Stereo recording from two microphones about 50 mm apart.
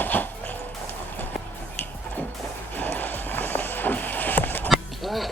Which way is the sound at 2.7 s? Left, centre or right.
Left.